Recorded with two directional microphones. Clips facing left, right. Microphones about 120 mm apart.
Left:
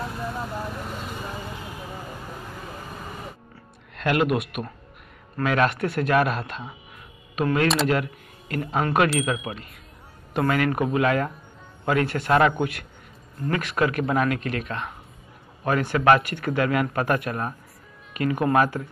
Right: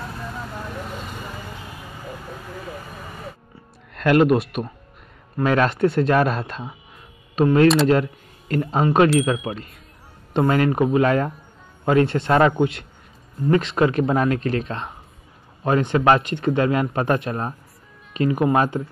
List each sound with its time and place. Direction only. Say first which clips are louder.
3.9 s speech: right 6 dB; 45° right (ahead or behind)
7.6 s speech: right 8 dB; centre (ahead or behind)
7.9 s speech: right 5 dB; 30° right (ahead or behind)